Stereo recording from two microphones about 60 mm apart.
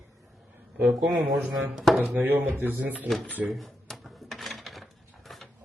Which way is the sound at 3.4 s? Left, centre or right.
Centre.